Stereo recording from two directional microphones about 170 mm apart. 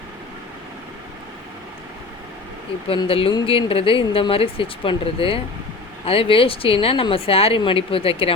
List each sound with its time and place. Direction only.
2.8 s speech: 30° left (ahead or behind)